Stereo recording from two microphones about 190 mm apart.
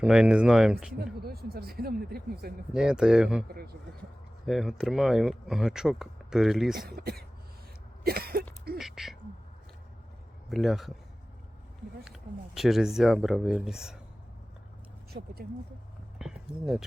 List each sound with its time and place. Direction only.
0.0 s speech: 5° right (ahead or behind)
0.9 s speech: 55° right (ahead or behind)
2.7 s speech: 5° right (ahead or behind)
4.4 s speech: centre (ahead or behind)
6.7 s speech: 55° right (ahead or behind)
8.8 s speech: centre (ahead or behind)
10.5 s speech: centre (ahead or behind)
12.0 s speech: centre (ahead or behind)
15.1 s speech: 60° right (ahead or behind)
16.1 s a sound: 5° right (ahead or behind)